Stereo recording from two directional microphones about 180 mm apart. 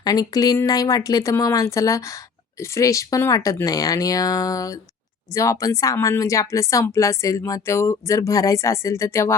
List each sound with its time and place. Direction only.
0.0 s speech: 20° left (ahead or behind)